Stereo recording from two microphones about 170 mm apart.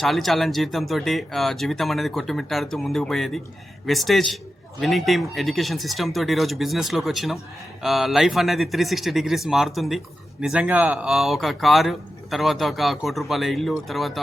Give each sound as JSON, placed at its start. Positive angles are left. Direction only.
{"t": 0.0, "sound": "speech", "side_deg": 0}